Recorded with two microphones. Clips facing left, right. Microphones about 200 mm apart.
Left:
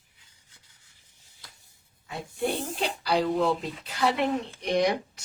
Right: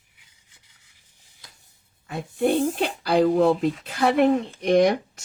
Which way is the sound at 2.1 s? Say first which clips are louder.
Right 7 dB; 55° right (ahead or behind).